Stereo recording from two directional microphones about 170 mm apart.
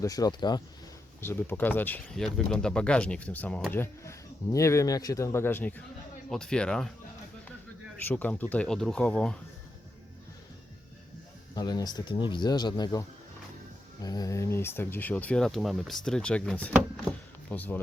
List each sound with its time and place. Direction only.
0.0 s speech: 20° left (ahead or behind)
1.2 s speech: 10° left (ahead or behind)
8.0 s speech: 10° left (ahead or behind)
11.5 s speech: 25° left (ahead or behind); by 16.7 s 5° left (ahead or behind)
17.0 s power windows: 5° left (ahead or behind)